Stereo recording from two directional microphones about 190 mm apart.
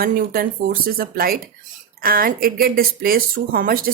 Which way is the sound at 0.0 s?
50° right (ahead or behind).